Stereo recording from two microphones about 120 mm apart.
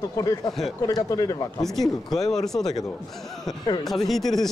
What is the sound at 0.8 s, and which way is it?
Speech, 30° left (ahead or behind).